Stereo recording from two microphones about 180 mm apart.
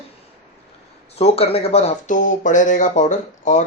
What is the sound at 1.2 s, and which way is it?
Speech, 35° left (ahead or behind).